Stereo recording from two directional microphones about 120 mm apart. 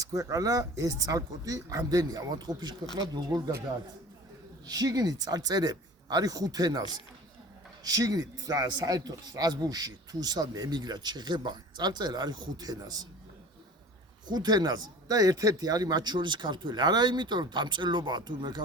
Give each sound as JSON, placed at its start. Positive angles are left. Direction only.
{"t": 0.0, "sound": "a man's voice", "side_deg": -30}
{"t": 4.6, "sound": "a man's voice", "side_deg": -35}
{"t": 14.3, "sound": "a man's voice", "side_deg": -35}